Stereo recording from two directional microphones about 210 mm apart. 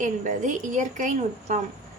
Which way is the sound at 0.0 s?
35° right (ahead or behind).